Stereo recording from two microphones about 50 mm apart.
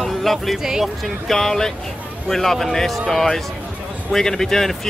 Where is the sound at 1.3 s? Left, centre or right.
Centre.